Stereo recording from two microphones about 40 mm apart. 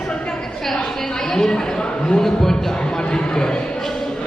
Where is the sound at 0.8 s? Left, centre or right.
Centre.